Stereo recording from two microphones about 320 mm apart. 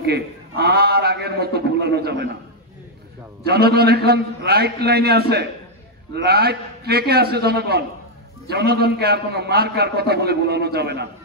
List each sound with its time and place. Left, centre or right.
0.0 s a man's voice: right
3.4 s a man's voice: right